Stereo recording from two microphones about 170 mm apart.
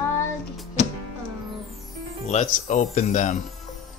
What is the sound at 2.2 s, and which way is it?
Speech, 45° left (ahead or behind).